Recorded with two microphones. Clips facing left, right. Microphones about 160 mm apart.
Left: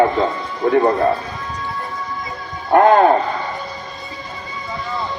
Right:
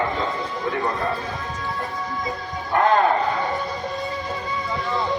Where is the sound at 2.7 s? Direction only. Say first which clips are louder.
Left 7 dB; 50° left (ahead or behind).